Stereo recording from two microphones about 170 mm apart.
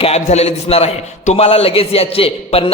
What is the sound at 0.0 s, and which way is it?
A man's voice, 40° left (ahead or behind).